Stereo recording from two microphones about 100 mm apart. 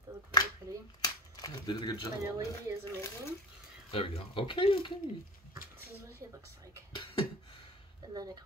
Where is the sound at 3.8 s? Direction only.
65° left (ahead or behind).